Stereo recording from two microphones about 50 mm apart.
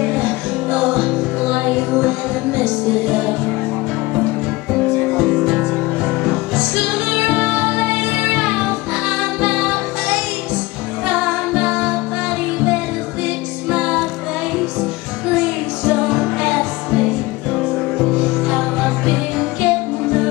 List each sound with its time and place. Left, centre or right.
1.5 s music: right
5.2 s music: centre
8.4 s music: centre
11.1 s music: centre
13.7 s music: centre
15.3 s music: centre
19.0 s music: centre